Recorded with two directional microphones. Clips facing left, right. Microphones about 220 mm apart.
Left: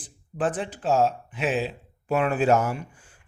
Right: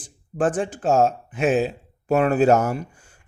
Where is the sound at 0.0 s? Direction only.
45° right (ahead or behind).